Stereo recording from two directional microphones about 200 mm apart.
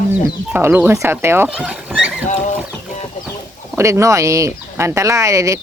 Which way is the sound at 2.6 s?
Centre (ahead or behind).